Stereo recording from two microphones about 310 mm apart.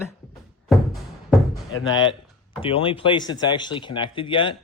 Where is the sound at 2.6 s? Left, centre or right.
Centre.